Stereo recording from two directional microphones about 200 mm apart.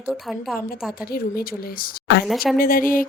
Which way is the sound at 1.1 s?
50° left (ahead or behind).